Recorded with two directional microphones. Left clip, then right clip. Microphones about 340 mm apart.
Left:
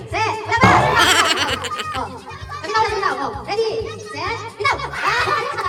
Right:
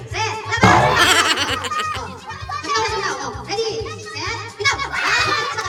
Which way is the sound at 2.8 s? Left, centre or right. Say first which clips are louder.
Left 3 dB; left.